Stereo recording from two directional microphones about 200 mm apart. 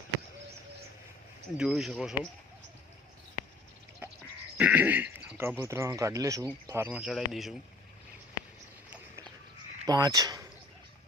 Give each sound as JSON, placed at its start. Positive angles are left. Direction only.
{"t": 1.5, "sound": "speech", "side_deg": 0}
{"t": 4.5, "sound": "speech", "side_deg": -10}
{"t": 9.8, "sound": "speech", "side_deg": -20}